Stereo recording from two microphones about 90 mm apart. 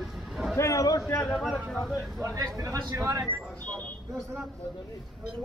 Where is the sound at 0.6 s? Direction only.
35° left (ahead or behind).